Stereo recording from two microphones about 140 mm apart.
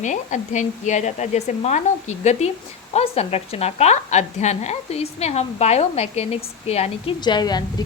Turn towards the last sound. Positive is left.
turn(degrees=30)  # may be behind; listen again after turning